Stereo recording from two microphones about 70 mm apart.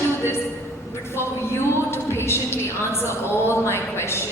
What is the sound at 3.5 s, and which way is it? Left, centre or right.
Speech, left.